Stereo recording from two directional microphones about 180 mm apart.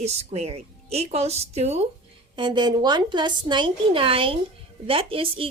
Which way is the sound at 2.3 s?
25° right (ahead or behind).